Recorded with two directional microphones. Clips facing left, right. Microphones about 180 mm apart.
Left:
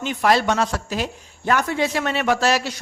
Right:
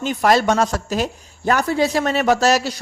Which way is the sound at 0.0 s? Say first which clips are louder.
Right 3 dB; 40° right (ahead or behind).